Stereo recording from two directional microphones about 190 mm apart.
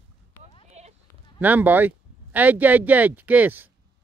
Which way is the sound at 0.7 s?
35° right (ahead or behind).